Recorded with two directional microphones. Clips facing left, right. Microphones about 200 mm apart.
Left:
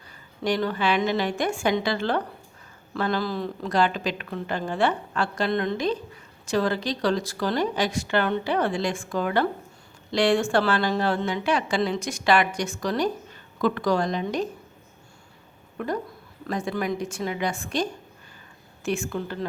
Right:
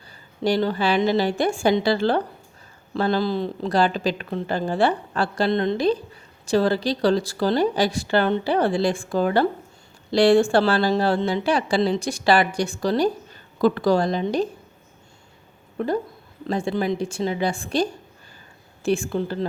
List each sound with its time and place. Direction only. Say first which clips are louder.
0.4 s speech: right 3 dB; 30° right (ahead or behind)
15.8 s a woman's voice: right 5 dB; 30° right (ahead or behind)